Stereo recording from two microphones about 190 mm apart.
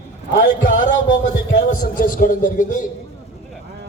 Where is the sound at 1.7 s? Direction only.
45° left (ahead or behind).